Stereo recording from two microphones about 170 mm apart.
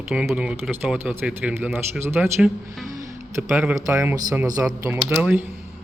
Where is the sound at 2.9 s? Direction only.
20° right (ahead or behind).